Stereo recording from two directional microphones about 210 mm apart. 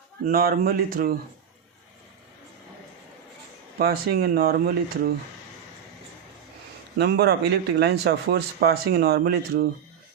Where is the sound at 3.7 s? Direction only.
45° right (ahead or behind).